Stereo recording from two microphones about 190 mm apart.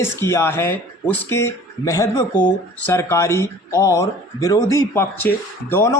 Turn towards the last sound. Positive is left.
turn(degrees=10)  # may be behind; listen again after turning